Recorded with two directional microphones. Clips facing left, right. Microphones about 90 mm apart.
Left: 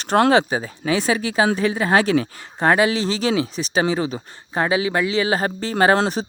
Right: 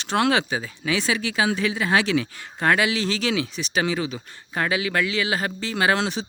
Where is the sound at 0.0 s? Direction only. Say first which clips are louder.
Left 6 dB; 45° left (ahead or behind).